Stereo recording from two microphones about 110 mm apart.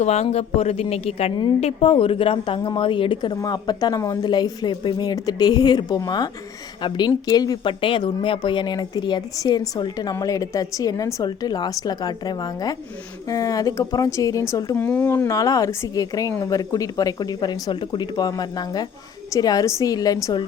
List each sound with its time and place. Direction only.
0.0 s a woman's voice: 85° left; by 15.4 s 20° left (ahead or behind)
15.4 s speech: 30° left (ahead or behind)